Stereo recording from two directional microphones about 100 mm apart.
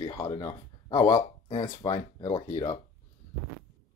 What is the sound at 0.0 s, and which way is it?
Speech, 30° left (ahead or behind).